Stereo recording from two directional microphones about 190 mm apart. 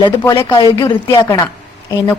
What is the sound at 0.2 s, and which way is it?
A woman's voice, 20° left (ahead or behind).